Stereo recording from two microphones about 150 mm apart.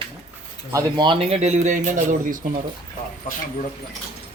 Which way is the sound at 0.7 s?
30° right (ahead or behind).